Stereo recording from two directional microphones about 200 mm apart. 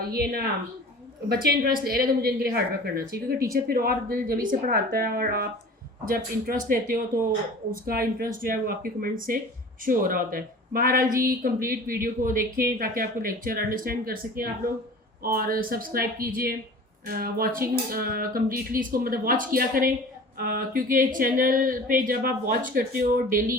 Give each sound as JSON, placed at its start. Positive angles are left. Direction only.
{"t": 0.1, "sound": "speech", "side_deg": -50}